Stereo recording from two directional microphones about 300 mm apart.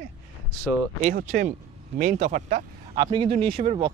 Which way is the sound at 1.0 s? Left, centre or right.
Right.